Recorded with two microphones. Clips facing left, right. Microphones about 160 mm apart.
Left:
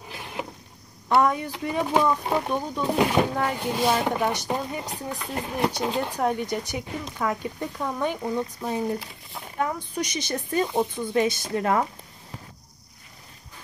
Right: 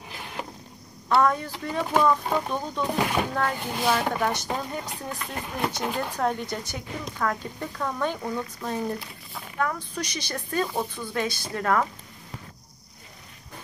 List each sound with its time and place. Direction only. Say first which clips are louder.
1.0 s speech: left 1 dB; 15° left (ahead or behind)